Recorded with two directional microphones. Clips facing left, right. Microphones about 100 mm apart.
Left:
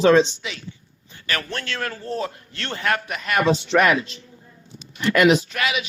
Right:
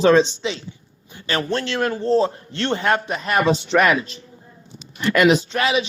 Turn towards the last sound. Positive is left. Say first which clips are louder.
# right 5 dB
turn(degrees=-30)  # may be behind; listen again after turning